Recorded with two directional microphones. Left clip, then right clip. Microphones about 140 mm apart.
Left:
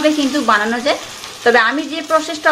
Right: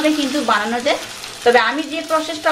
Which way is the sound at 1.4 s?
35° left (ahead or behind).